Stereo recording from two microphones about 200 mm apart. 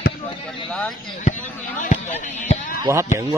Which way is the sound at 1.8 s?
40° left (ahead or behind).